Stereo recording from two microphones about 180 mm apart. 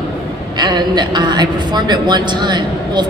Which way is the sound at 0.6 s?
25° right (ahead or behind).